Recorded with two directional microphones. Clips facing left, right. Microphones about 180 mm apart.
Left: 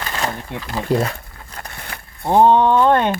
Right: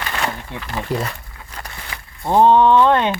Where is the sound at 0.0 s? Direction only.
35° left (ahead or behind).